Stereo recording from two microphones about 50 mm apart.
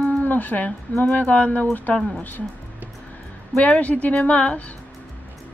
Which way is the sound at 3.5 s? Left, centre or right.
Left.